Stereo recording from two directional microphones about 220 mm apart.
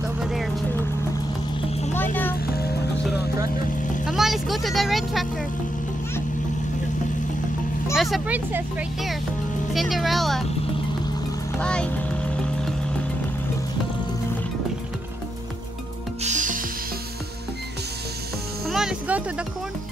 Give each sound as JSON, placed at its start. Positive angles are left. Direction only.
{"t": 0.2, "sound": "vehicle", "side_deg": 0}
{"t": 2.4, "sound": "music", "side_deg": 45}
{"t": 4.1, "sound": "speech", "side_deg": 0}
{"t": 7.9, "sound": "speech", "side_deg": 0}
{"t": 11.6, "sound": "speech", "side_deg": 5}
{"t": 16.2, "sound": "music", "side_deg": -35}
{"t": 18.7, "sound": "music", "side_deg": 0}